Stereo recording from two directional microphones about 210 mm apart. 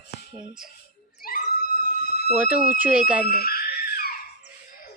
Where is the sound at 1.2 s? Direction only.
45° left (ahead or behind).